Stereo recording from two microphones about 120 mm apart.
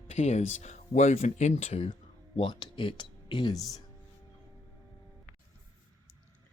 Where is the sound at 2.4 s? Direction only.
45° left (ahead or behind).